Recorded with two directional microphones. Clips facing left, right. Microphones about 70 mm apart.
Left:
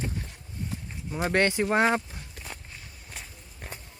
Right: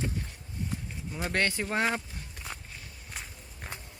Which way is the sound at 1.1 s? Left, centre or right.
Left.